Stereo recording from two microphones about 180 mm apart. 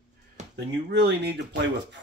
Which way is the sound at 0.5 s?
65° right (ahead or behind).